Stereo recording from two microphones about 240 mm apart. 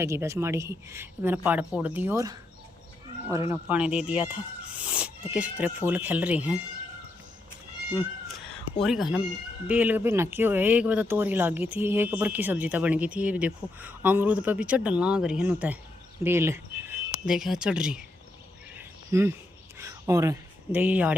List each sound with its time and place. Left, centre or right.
0.0 s speech: centre
8.8 s speech: centre
18.8 s cricket: centre
19.8 s speech: centre